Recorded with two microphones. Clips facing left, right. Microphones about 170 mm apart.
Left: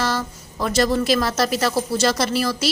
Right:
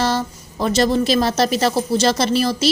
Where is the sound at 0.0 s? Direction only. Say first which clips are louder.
Right 4 dB; 25° right (ahead or behind).